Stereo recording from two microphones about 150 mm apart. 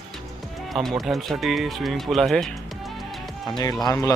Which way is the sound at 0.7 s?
Centre (ahead or behind).